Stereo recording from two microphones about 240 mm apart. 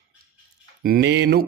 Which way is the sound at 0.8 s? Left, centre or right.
Right.